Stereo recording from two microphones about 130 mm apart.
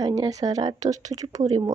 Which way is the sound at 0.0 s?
30° right (ahead or behind).